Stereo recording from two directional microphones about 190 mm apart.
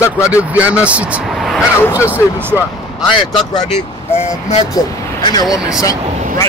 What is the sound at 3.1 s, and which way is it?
Speech, 25° left (ahead or behind).